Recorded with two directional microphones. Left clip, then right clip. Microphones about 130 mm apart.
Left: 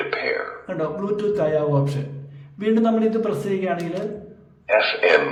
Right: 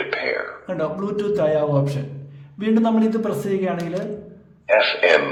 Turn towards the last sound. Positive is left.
turn(degrees=-15)  # may be behind; listen again after turning